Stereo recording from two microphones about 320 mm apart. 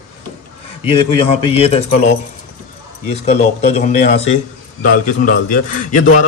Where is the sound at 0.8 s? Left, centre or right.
Centre.